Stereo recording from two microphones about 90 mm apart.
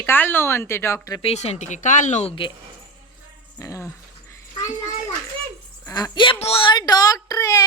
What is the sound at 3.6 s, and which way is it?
Speech, 35° left (ahead or behind).